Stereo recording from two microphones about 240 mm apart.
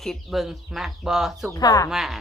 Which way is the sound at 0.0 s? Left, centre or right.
Centre.